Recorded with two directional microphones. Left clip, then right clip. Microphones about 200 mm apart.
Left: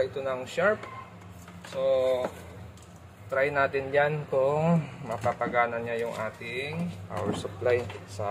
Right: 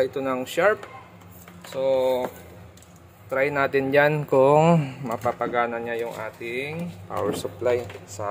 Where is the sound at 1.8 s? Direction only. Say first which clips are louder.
Right 3 dB; 55° right (ahead or behind).